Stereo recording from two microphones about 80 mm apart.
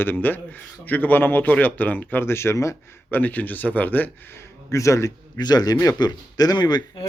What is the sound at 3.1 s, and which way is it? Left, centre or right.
Speech, left.